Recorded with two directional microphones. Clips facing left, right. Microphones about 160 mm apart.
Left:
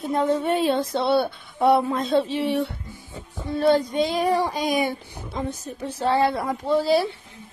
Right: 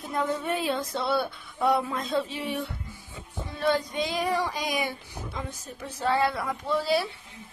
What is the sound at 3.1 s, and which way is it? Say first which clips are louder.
Child singing: left 9 dB; 35° left (ahead or behind).